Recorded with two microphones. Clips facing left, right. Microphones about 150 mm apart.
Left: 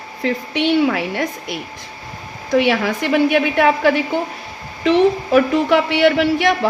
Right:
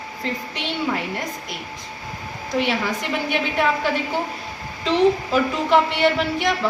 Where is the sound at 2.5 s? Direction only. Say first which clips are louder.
Left 7 dB; 65° left (ahead or behind).